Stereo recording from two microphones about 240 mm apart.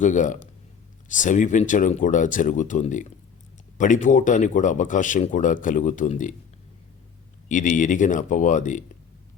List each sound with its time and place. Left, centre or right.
0.0 s speech: left
7.4 s speech: left